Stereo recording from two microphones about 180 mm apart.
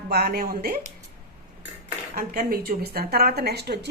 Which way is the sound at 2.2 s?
55° right (ahead or behind).